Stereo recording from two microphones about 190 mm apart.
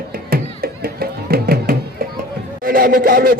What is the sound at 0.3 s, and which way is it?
Music, 55° right (ahead or behind).